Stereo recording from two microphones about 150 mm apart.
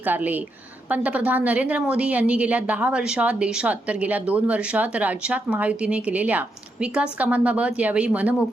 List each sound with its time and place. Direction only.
0.0 s a woman's voice: 10° right (ahead or behind)